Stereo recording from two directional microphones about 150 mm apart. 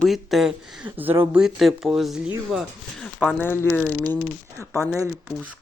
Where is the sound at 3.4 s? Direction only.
15° left (ahead or behind).